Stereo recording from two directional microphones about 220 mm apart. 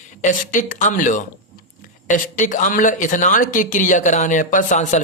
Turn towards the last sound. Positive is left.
turn(degrees=35)  # may be behind; listen again after turning